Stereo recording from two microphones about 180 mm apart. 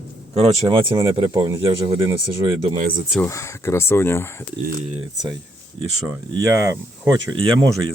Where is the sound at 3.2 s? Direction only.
15° left (ahead or behind).